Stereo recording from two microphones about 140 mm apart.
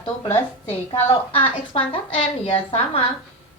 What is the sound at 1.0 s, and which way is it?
A woman's voice, 45° left (ahead or behind).